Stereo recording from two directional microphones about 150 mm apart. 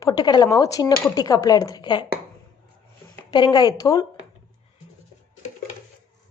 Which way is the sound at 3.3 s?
30° left (ahead or behind).